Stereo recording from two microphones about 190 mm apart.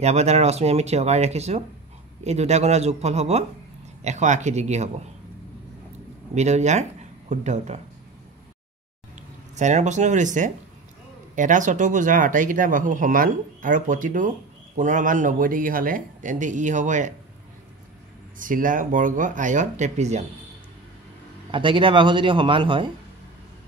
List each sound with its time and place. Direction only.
0.0 s speech: 35° right (ahead or behind)
6.3 s speech: 35° right (ahead or behind)
9.6 s speech: 40° right (ahead or behind)
18.4 s speech: 45° right (ahead or behind)
21.5 s a man's voice: 25° right (ahead or behind)